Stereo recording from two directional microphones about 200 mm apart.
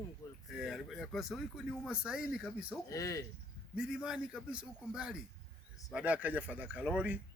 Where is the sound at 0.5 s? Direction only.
Centre (ahead or behind).